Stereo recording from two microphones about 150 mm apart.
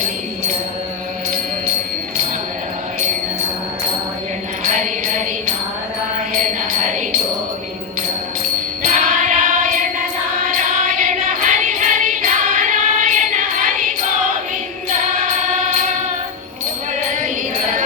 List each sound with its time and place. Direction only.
4.6 s mantra: 55° right (ahead or behind)
6.3 s jingle bell: 60° right (ahead or behind)
8.8 s music: 60° right (ahead or behind)
14.8 s music: 55° right (ahead or behind)